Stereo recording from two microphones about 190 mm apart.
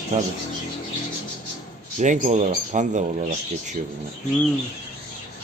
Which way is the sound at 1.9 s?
40° right (ahead or behind).